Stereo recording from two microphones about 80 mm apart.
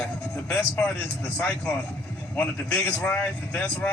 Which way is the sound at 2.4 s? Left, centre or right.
Centre.